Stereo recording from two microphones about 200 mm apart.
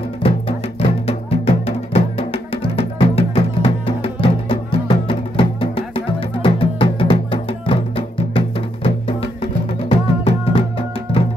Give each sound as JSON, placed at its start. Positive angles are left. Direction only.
{"t": 0.2, "sound": "music", "side_deg": 30}